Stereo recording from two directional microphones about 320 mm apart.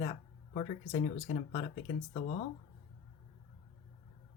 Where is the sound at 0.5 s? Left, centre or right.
Centre.